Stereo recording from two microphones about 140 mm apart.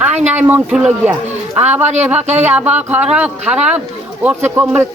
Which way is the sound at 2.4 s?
10° right (ahead or behind).